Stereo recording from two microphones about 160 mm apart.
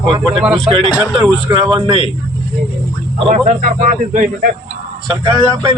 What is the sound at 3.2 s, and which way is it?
Speech, 40° right (ahead or behind).